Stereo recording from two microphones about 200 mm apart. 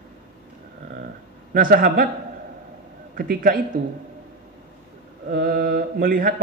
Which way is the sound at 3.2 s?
45° right (ahead or behind).